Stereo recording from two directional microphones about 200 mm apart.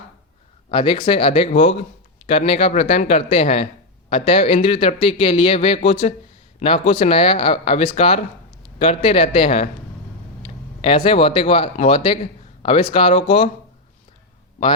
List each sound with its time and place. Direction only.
0.7 s a man's voice: 25° left (ahead or behind)